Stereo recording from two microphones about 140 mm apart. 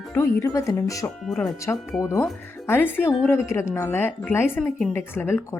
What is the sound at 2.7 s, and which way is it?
A woman's voice, 15° left (ahead or behind).